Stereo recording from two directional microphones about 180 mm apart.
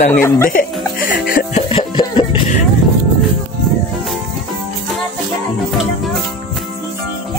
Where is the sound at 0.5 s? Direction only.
50° left (ahead or behind).